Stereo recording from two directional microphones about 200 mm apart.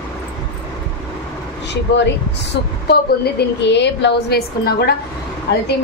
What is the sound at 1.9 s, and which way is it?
A woman's voice, 60° left (ahead or behind).